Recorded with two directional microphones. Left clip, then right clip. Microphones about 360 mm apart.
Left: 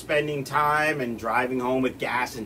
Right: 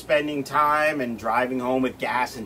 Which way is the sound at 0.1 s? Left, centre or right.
Centre.